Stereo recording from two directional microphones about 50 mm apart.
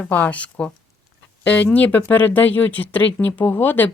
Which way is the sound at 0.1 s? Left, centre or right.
Left.